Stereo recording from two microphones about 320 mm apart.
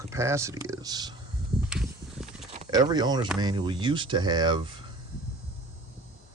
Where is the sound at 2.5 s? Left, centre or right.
Centre.